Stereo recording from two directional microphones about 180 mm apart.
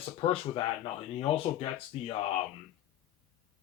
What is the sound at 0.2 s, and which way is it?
Speech, 30° left (ahead or behind).